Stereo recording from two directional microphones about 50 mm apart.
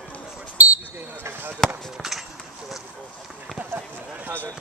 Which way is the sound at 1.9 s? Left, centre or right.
Centre.